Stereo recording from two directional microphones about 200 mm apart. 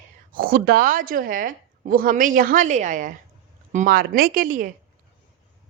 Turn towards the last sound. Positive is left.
turn(degrees=-40)  # may be behind; listen again after turning